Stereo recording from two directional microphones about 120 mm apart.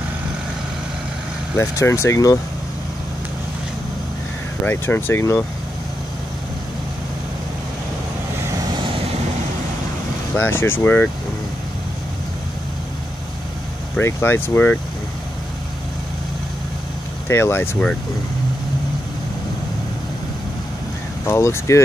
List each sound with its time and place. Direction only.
1.6 s speech: 25° left (ahead or behind)
4.6 s speech: 15° left (ahead or behind)
10.3 s speech: 20° left (ahead or behind)
13.9 s speech: 20° left (ahead or behind)
17.3 s speech: 20° left (ahead or behind)
21.3 s speech: 25° left (ahead or behind)